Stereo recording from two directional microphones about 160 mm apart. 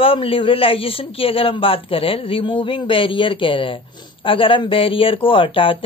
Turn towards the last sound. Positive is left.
turn(degrees=35)  # may be behind; listen again after turning